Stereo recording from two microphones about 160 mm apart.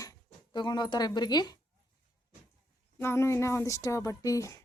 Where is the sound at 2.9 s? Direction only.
15° left (ahead or behind).